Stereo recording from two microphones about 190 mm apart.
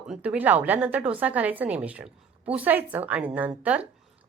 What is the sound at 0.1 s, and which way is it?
A woman's voice, 5° right (ahead or behind).